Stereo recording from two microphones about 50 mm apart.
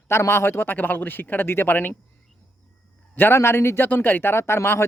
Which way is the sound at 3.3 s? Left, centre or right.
Left.